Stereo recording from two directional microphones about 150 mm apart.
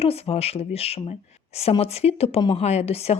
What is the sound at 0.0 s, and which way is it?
Speech, 40° left (ahead or behind).